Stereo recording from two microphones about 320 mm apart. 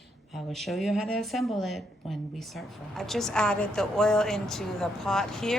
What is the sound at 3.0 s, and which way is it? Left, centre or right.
A woman's voice, centre.